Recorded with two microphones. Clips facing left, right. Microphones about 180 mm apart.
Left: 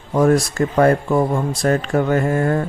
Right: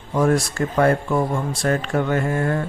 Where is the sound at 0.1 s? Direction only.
40° left (ahead or behind).